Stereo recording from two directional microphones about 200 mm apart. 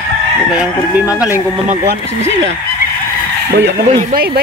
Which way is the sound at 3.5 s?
50° right (ahead or behind).